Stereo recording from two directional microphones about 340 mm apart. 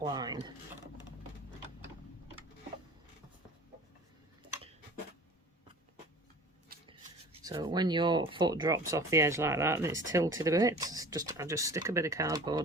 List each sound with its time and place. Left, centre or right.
0.0 s speech: centre
7.3 s speech: centre